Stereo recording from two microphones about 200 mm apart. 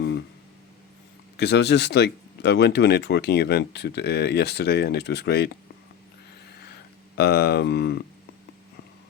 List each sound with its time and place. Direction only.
1.4 s speech: 55° left (ahead or behind)
7.2 s speech: 55° left (ahead or behind)